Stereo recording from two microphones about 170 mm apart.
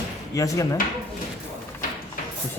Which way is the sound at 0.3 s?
20° left (ahead or behind).